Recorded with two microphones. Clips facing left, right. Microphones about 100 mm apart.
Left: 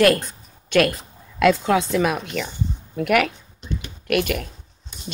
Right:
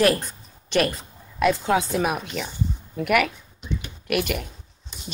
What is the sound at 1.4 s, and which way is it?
Speech, 70° left (ahead or behind).